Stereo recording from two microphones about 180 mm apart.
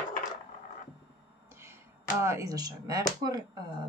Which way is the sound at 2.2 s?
15° right (ahead or behind).